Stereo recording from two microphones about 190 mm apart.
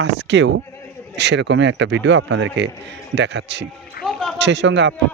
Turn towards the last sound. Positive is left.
turn(degrees=-70)  # may be behind; listen again after turning